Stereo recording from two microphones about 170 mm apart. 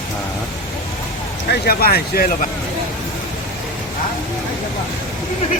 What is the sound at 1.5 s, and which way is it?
Speech, 65° left (ahead or behind).